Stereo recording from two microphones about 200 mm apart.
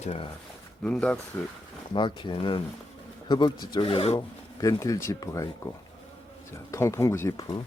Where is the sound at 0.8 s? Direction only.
5° left (ahead or behind).